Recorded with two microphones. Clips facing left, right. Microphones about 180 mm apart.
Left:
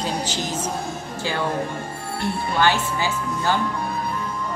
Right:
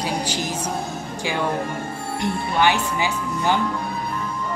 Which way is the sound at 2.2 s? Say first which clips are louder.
Right 1 dB; 15° right (ahead or behind).